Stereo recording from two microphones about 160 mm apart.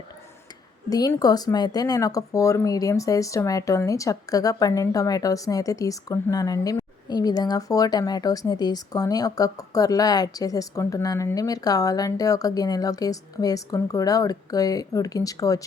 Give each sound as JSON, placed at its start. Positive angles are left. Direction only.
{"t": 0.9, "sound": "speech", "side_deg": 25}